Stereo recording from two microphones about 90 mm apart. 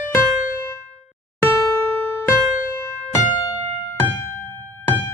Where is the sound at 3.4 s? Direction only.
35° left (ahead or behind).